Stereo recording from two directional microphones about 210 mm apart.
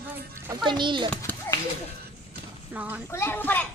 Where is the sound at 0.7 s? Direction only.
20° right (ahead or behind).